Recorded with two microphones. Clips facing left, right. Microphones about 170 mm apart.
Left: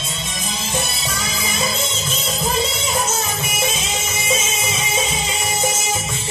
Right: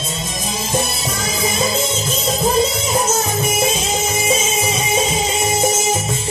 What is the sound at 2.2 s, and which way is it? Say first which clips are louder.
Music: right 6 dB; 40° right (ahead or behind).